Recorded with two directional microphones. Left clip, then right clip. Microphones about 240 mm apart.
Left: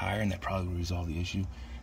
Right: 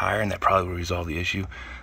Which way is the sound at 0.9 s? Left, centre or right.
Right.